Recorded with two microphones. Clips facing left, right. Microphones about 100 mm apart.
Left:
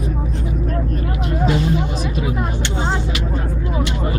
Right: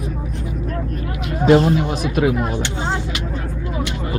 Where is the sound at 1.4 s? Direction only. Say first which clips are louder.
Right 7 dB; 55° right (ahead or behind).